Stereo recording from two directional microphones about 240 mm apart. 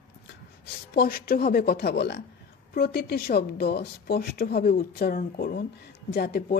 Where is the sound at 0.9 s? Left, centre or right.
Left.